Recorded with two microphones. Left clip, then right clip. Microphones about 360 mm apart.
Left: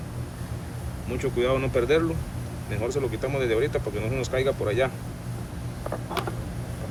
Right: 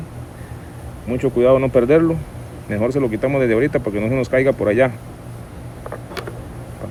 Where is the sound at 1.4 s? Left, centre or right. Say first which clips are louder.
Right 11 dB; centre.